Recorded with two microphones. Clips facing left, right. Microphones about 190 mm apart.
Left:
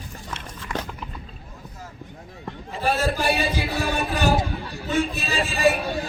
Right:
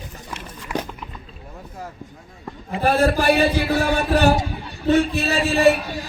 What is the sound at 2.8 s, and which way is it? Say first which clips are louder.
Speech: right 5 dB; 55° right (ahead or behind).